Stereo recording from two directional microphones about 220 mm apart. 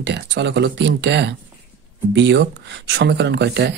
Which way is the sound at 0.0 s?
50° right (ahead or behind).